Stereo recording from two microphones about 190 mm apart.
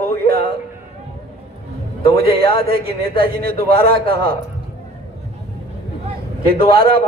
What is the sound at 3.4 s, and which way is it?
Speech, 55° right (ahead or behind).